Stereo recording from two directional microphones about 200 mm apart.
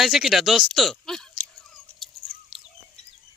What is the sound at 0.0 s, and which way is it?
Speech, centre (ahead or behind).